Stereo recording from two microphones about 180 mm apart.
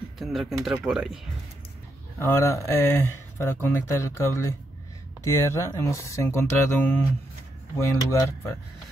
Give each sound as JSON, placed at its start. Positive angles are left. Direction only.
{"t": 0.2, "sound": "speech", "side_deg": 0}
{"t": 2.1, "sound": "speech", "side_deg": 15}